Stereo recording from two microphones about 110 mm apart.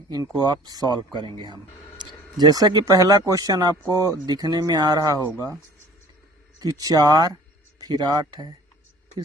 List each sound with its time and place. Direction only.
0.1 s speech: 35° right (ahead or behind)
6.6 s speech: 35° right (ahead or behind)